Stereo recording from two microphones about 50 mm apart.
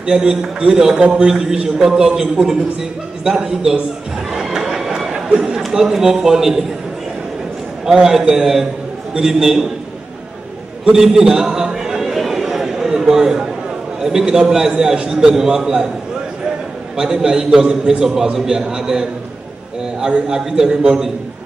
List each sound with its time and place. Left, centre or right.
0.0 s a man's voice: centre
4.3 s a sound: centre
5.7 s a man's voice: centre
7.8 s a man's voice: centre
10.9 s a sound: centre
14.0 s a man's voice: centre
16.9 s a man's voice: centre